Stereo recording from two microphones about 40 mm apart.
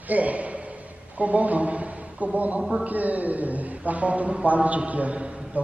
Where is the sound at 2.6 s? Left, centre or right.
Centre.